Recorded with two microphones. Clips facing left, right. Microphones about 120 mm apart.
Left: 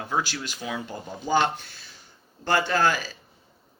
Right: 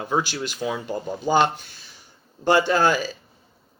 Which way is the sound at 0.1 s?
20° right (ahead or behind).